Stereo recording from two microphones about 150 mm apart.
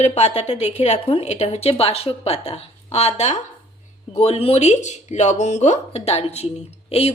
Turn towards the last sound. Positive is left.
turn(degrees=40)  # may be behind; listen again after turning